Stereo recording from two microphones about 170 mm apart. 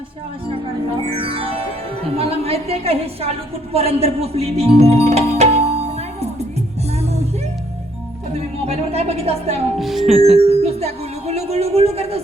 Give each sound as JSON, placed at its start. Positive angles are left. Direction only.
{"t": 1.1, "sound": "music", "side_deg": -30}
{"t": 2.1, "sound": "a woman's voice", "side_deg": -35}
{"t": 8.6, "sound": "a sound", "side_deg": -40}
{"t": 9.7, "sound": "speech", "side_deg": 0}
{"t": 10.3, "sound": "speech", "side_deg": -35}